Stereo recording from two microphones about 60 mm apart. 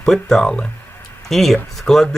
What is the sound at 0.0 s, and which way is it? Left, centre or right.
Speech, centre.